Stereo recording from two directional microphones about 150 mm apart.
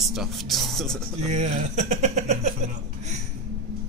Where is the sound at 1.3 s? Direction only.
50° right (ahead or behind).